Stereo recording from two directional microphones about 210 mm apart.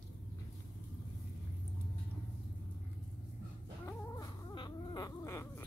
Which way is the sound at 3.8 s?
20° left (ahead or behind).